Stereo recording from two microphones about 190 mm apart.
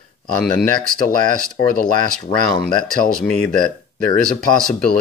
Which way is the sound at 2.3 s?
30° left (ahead or behind).